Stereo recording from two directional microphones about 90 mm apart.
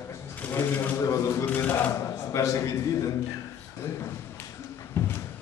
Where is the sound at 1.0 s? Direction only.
35° left (ahead or behind).